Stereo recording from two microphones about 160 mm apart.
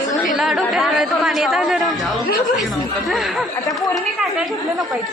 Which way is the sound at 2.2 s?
65° left (ahead or behind).